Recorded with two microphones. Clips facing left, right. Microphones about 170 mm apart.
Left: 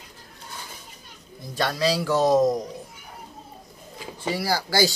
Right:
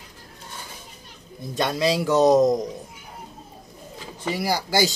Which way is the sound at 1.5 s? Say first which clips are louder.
Right 1 dB; 20° right (ahead or behind).